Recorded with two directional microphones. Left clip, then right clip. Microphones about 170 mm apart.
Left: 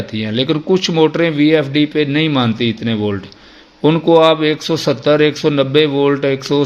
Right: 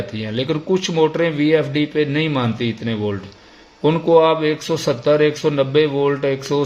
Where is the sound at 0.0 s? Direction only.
35° left (ahead or behind).